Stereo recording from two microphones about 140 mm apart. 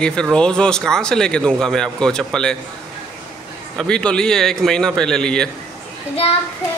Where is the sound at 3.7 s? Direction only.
5° left (ahead or behind).